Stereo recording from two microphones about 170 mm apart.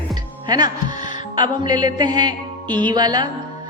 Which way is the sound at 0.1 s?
25° right (ahead or behind).